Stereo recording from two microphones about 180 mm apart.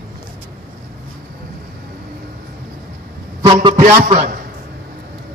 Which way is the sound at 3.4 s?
25° right (ahead or behind).